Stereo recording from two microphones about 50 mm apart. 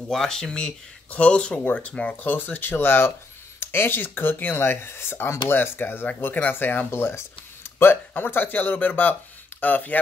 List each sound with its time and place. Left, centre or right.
0.1 s speech: centre
1.1 s speech: left
1.6 s speech: left
6.9 s speech: left
7.8 s speech: left